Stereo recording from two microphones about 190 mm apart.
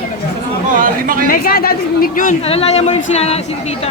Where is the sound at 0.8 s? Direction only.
50° right (ahead or behind).